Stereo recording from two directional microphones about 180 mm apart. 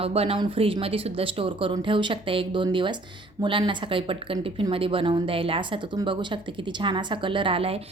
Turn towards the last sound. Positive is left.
turn(degrees=-30)  # may be behind; listen again after turning